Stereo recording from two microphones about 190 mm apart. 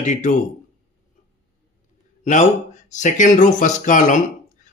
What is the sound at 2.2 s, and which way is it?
Speech, 40° left (ahead or behind).